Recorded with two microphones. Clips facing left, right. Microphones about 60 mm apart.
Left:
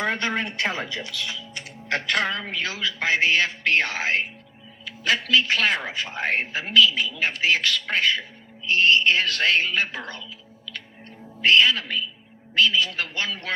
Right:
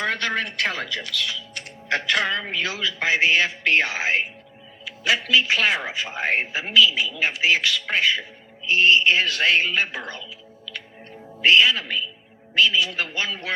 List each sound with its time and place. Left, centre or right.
0.0 s speech: left
2.0 s music: left
3.0 s speech: right
11.3 s speech: centre